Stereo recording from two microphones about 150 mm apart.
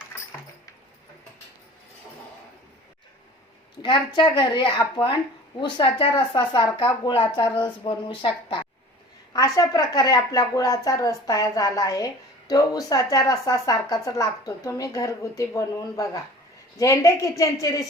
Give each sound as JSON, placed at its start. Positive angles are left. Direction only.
{"t": 3.8, "sound": "a woman's voice", "side_deg": 30}